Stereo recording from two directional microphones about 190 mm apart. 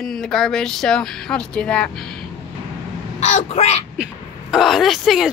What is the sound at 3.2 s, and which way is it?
Speech, 35° left (ahead or behind).